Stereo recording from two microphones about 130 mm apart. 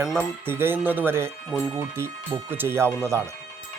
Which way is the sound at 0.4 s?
15° right (ahead or behind).